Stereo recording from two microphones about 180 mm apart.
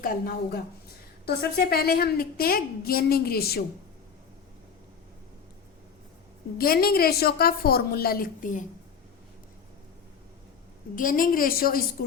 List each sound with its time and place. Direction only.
0.0 s a woman's voice: 55° left (ahead or behind)
6.6 s a woman's voice: 55° left (ahead or behind)
10.9 s a woman's voice: 50° left (ahead or behind)